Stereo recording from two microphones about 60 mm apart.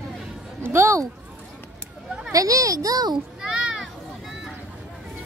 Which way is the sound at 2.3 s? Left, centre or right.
Right.